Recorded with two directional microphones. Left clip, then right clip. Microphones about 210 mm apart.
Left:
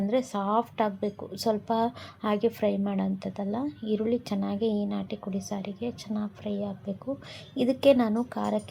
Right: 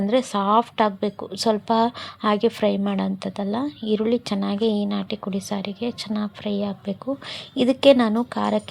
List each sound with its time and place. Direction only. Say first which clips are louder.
0.0 s a woman's voice: right 7 dB; 15° right (ahead or behind)